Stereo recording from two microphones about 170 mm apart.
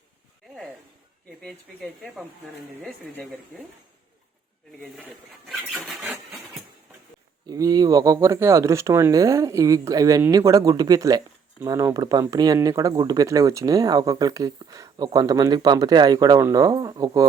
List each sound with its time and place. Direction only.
1.4 s speech: 5° left (ahead or behind)
4.8 s speech: centre (ahead or behind)
7.4 s speech: 20° right (ahead or behind)